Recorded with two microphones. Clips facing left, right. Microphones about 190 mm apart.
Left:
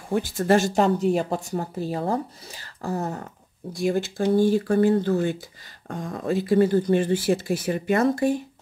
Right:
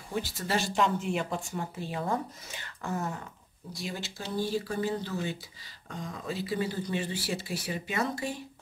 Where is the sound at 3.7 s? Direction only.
50° left (ahead or behind).